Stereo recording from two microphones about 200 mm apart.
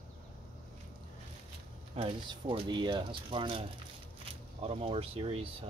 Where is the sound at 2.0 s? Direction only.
25° right (ahead or behind).